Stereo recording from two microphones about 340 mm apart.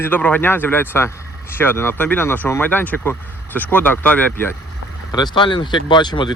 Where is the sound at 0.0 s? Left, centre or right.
Centre.